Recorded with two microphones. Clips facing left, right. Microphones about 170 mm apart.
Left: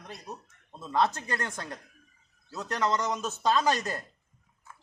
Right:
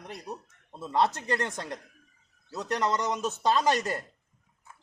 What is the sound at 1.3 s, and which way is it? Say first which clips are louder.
Speech: right 4 dB; 20° right (ahead or behind).